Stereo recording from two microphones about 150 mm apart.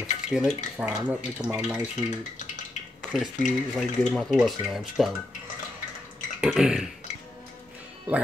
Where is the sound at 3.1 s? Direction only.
Centre (ahead or behind).